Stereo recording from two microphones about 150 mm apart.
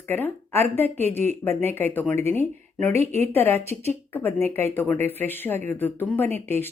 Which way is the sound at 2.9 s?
45° right (ahead or behind).